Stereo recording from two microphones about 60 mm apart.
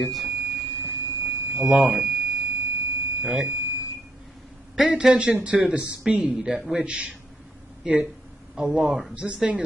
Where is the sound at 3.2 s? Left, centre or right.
Centre.